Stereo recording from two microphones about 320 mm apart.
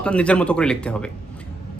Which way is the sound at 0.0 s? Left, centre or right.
Centre.